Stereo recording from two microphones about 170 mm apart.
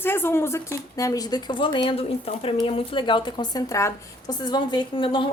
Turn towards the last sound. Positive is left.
turn(degrees=30)  # may be behind; listen again after turning